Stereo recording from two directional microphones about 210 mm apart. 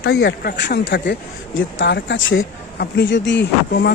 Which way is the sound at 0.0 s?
50° left (ahead or behind).